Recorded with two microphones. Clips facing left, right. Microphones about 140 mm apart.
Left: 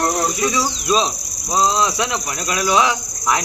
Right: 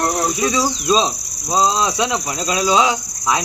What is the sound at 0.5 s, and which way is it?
Speech, 25° right (ahead or behind).